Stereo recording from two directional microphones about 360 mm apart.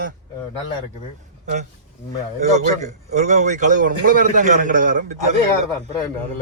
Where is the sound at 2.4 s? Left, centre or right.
Centre.